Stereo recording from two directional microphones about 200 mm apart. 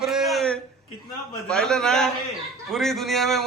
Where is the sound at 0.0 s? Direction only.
Centre (ahead or behind).